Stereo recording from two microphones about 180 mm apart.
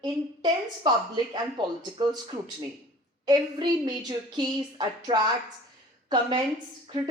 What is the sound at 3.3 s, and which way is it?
Speech, 25° right (ahead or behind).